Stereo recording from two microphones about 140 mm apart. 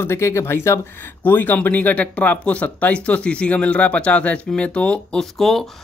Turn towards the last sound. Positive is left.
turn(degrees=0)  # may be behind; listen again after turning